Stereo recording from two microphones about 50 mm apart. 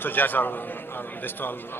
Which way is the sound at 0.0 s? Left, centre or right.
Left.